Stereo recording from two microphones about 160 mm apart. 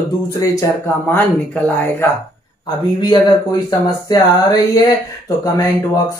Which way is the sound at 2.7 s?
25° left (ahead or behind).